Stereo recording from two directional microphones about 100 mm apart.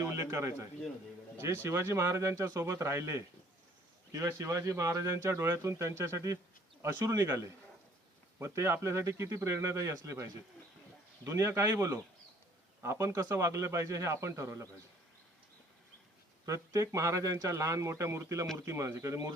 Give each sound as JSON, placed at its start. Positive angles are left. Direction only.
{"t": 0.0, "sound": "bird", "side_deg": -30}
{"t": 1.4, "sound": "speech", "side_deg": -25}
{"t": 8.4, "sound": "speech", "side_deg": -30}
{"t": 16.5, "sound": "speech", "side_deg": -30}